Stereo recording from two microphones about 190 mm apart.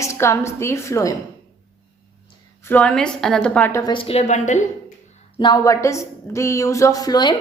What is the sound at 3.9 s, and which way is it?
Speech, 30° left (ahead or behind).